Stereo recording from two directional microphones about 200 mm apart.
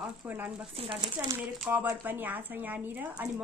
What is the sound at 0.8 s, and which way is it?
Speech, 25° right (ahead or behind).